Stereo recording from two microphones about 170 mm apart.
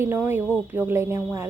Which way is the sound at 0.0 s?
10° right (ahead or behind).